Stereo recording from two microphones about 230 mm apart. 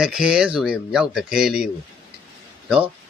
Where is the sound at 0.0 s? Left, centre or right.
Centre.